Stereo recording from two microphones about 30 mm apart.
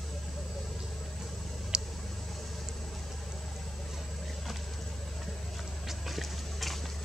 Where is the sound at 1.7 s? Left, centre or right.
Right.